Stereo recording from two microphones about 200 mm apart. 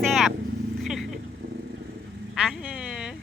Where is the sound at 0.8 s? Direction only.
Centre (ahead or behind).